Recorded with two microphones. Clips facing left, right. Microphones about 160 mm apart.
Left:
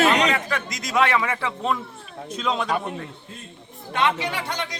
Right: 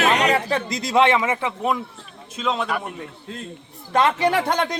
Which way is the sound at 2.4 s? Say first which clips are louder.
Right 1 dB; 5° right (ahead or behind).